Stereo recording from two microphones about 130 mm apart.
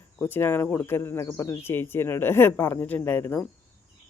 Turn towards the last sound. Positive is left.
turn(degrees=15)  # may be behind; listen again after turning